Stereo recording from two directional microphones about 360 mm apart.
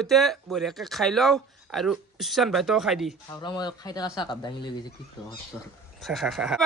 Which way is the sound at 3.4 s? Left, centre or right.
Centre.